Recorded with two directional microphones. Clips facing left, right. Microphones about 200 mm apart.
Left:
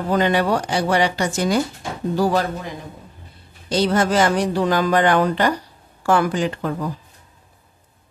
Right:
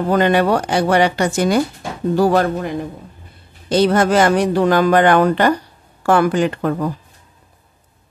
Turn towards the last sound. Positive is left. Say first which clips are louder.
# right 5 dB
turn(degrees=-55)  # may be behind; listen again after turning